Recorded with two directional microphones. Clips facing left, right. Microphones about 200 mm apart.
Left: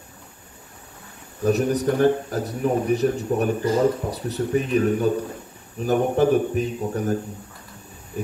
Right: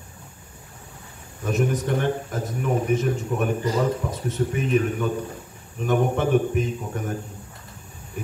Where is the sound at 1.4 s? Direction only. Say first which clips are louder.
Left 4 dB; 40° left (ahead or behind).